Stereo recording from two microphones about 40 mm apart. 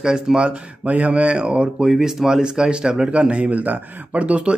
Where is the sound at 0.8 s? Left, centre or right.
Right.